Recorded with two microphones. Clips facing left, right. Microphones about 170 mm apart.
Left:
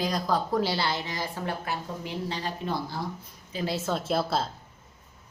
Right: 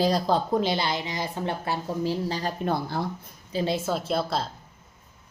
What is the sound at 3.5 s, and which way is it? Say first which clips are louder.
Speech: right 4 dB; 25° right (ahead or behind).